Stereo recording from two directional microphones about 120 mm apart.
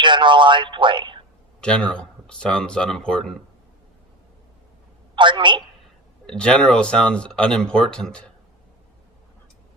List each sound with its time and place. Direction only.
0.0 s speech: 40° right (ahead or behind)
1.6 s speech: 10° left (ahead or behind)
5.1 s a woman's voice: 40° right (ahead or behind)
6.2 s speech: 5° left (ahead or behind)